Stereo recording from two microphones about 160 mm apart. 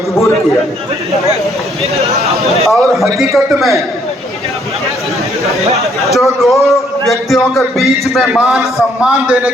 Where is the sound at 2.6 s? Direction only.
Centre (ahead or behind).